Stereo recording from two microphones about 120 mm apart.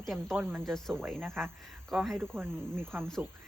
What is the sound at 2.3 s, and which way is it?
Speech, 20° right (ahead or behind).